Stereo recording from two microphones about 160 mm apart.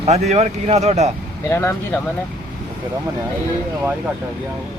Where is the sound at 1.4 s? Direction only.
15° left (ahead or behind).